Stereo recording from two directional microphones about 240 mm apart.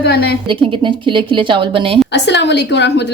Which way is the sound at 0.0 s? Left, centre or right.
Left.